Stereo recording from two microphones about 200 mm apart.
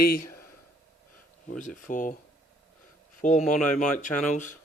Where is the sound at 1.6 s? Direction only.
40° left (ahead or behind).